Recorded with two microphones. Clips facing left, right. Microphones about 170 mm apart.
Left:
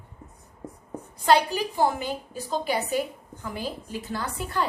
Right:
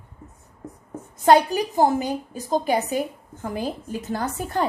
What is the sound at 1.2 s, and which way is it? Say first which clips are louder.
A woman's voice: right 5 dB; 45° right (ahead or behind).